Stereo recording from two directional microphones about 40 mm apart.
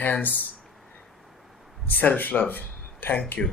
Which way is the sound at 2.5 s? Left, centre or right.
Left.